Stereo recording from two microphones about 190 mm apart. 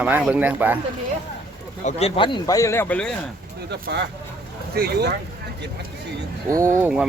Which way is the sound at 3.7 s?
60° right (ahead or behind).